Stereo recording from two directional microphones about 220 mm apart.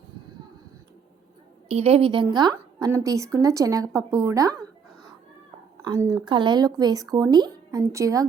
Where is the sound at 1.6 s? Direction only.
25° right (ahead or behind).